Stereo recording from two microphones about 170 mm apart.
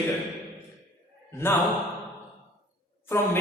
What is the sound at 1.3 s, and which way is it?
Speech, 15° left (ahead or behind).